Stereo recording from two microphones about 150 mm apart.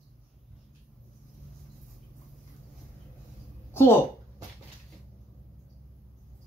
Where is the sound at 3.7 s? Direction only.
15° left (ahead or behind).